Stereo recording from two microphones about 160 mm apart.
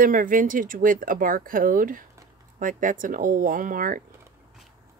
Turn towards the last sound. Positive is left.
turn(degrees=-55)  # may be behind; listen again after turning